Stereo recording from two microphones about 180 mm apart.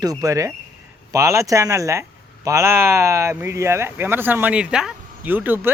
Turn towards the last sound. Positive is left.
turn(degrees=-10)  # may be behind; listen again after turning